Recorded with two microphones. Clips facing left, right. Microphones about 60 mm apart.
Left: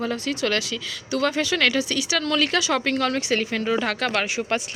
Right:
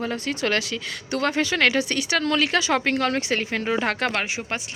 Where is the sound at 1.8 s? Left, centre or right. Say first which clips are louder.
Right 1 dB; right.